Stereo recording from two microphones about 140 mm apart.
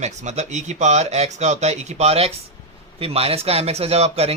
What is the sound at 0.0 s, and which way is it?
Speech, 55° right (ahead or behind).